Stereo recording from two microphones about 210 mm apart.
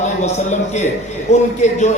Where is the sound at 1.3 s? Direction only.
35° left (ahead or behind).